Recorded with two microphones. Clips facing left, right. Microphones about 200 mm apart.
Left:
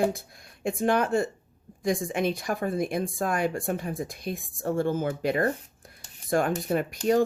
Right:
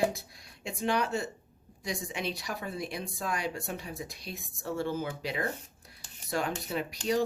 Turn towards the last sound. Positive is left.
turn(degrees=50)  # may be behind; listen again after turning